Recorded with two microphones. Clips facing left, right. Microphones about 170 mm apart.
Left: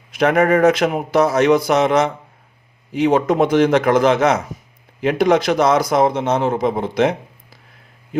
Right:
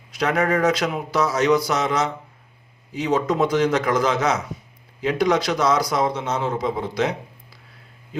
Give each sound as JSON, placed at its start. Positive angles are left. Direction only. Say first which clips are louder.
{"t": 0.2, "sound": "a man's voice", "louder": "left 6 dB", "side_deg": 50}